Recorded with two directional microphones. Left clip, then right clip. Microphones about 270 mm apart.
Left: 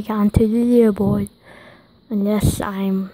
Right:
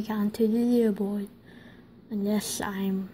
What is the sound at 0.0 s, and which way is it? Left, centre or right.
A woman's voice, centre.